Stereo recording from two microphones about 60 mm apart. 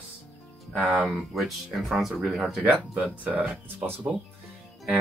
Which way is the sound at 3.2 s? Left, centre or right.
Right.